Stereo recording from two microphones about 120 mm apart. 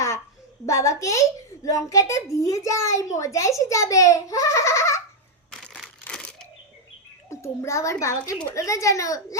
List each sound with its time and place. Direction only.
0.6 s a woman's voice: 25° left (ahead or behind)
5.5 s crumpling: 5° left (ahead or behind)
7.3 s a woman's voice: 25° left (ahead or behind)